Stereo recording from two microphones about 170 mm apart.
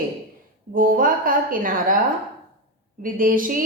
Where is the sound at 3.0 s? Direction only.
55° right (ahead or behind).